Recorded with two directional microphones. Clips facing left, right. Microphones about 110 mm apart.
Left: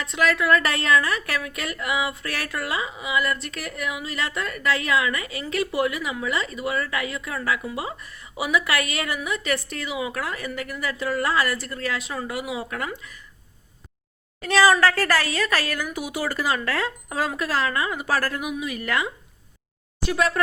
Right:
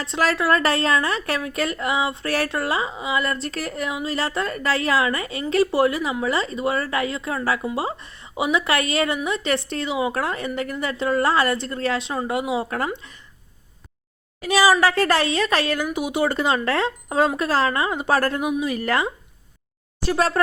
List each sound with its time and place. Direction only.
0.0 s a woman's voice: 35° right (ahead or behind)
14.4 s a woman's voice: 10° right (ahead or behind); by 20.4 s 35° right (ahead or behind)